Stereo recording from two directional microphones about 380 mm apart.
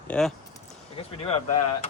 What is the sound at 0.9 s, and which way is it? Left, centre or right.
Speech, centre.